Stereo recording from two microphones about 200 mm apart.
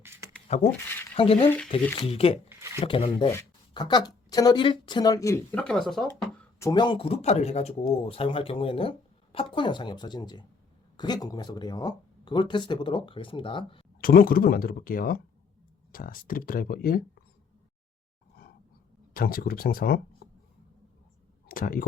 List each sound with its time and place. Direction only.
0.5 s speech: 35° left (ahead or behind)
1.5 s speech: 5° left (ahead or behind)
2.0 s speech: 30° left (ahead or behind); by 6.1 s centre (ahead or behind)
6.6 s speech: 20° left (ahead or behind)
14.0 s speech: 45° left (ahead or behind)
19.1 s speech: 45° left (ahead or behind)
21.4 s speech: 45° left (ahead or behind)